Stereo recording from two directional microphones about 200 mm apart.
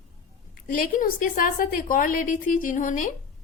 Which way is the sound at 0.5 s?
45° left (ahead or behind).